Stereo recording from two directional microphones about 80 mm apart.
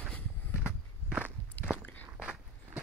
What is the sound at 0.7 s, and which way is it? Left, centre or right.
Walk, centre.